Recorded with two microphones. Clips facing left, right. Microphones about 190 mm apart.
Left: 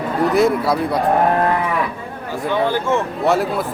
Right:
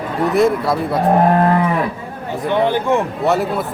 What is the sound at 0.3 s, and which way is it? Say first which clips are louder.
Speech: right 1 dB; centre (ahead or behind).